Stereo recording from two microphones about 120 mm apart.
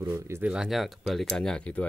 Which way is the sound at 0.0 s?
25° right (ahead or behind).